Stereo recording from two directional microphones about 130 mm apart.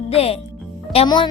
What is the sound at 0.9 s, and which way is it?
Speech, 40° left (ahead or behind).